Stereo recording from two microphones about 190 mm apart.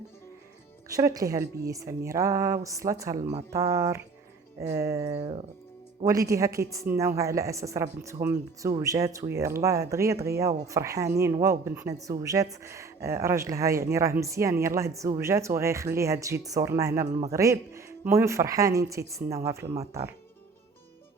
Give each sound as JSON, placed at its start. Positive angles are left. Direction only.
{"t": 0.9, "sound": "a woman's voice", "side_deg": -20}
{"t": 3.2, "sound": "speech", "side_deg": -40}
{"t": 3.5, "sound": "a woman's voice", "side_deg": -15}
{"t": 5.0, "sound": "speech", "side_deg": -35}
{"t": 6.1, "sound": "a woman's voice", "side_deg": -15}
{"t": 17.1, "sound": "speech", "side_deg": -35}
{"t": 17.3, "sound": "a woman's voice", "side_deg": -15}